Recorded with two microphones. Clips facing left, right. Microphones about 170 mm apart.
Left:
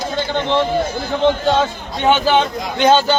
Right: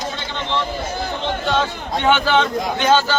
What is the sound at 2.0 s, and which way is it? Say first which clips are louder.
Speech: left 3 dB; 20° left (ahead or behind).